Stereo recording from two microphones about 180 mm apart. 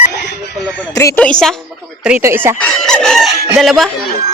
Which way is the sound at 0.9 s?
15° left (ahead or behind).